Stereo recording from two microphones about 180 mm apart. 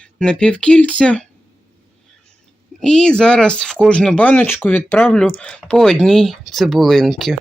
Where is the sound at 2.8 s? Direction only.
5° left (ahead or behind).